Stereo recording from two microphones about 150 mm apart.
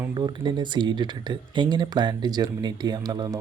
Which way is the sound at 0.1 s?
30° right (ahead or behind).